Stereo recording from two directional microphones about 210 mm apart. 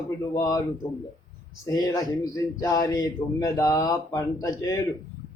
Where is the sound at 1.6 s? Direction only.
15° left (ahead or behind).